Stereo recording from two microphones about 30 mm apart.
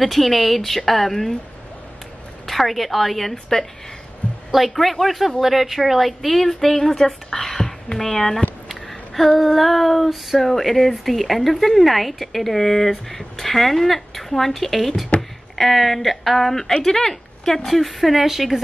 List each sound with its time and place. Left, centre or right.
0.0 s speech: centre
2.4 s speech: centre
4.5 s speech: centre
7.2 s a sound: centre
8.0 s speech: centre
8.6 s a sound: centre
9.4 s speech: centre
10.4 s speech: centre
15.1 s a sound: left
15.5 s speech: centre
17.6 s a woman's voice: centre